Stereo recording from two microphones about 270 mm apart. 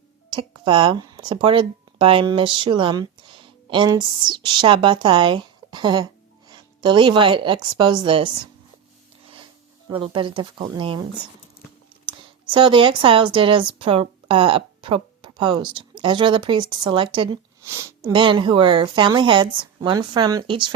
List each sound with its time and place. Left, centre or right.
0.3 s a woman's voice: centre
9.9 s speech: centre